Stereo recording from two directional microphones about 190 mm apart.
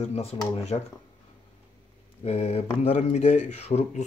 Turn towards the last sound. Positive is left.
turn(degrees=35)  # may be behind; listen again after turning